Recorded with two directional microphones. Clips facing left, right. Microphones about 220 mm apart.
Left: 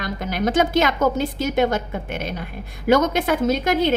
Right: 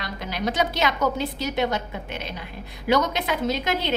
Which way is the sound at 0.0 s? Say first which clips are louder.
Left 5 dB; 50° left (ahead or behind).